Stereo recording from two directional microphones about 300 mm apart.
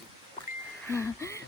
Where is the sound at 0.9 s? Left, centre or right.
Centre.